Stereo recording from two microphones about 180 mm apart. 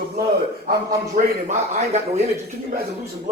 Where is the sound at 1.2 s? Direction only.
45° right (ahead or behind).